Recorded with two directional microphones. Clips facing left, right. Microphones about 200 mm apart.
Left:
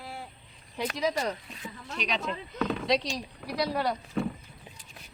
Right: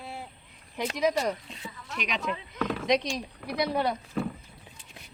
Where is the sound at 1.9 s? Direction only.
35° left (ahead or behind).